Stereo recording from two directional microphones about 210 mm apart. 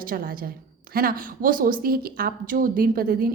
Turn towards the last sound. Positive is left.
turn(degrees=-45)  # may be behind; listen again after turning